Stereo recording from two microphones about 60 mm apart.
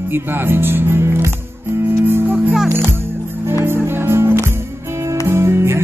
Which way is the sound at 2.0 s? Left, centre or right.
Right.